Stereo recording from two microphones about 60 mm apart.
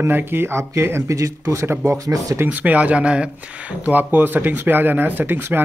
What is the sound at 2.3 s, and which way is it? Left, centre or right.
Speech, right.